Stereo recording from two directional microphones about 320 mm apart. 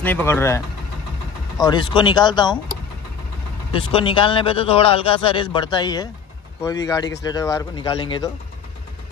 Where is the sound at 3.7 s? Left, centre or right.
Centre.